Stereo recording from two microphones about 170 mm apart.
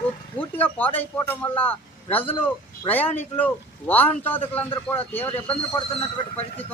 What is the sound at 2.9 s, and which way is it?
A man's voice, 10° left (ahead or behind).